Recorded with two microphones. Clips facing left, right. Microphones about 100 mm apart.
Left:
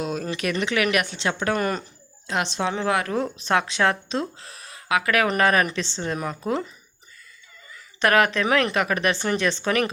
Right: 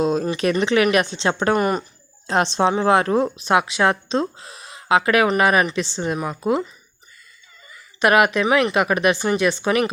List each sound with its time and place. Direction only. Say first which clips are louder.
0.0 s a woman's voice: right 7 dB; 30° right (ahead or behind)
1.5 s speech: right 5 dB; 20° right (ahead or behind)
2.2 s a woman's voice: right 7 dB; 35° right (ahead or behind)
3.3 s speech: right 4 dB; 15° right (ahead or behind)
5.4 s speech: right 3 dB; 15° right (ahead or behind)
7.7 s a sound: right 3 dB; 15° right (ahead or behind)
8.4 s speech: right 3 dB; 5° right (ahead or behind)
8.7 s speech: right 5 dB; 20° right (ahead or behind)